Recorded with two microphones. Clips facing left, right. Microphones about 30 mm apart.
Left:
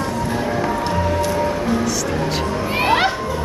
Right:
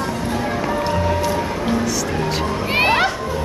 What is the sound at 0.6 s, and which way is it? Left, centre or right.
Music, centre.